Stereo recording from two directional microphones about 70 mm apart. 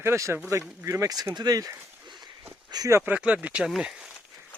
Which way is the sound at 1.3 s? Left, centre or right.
Right.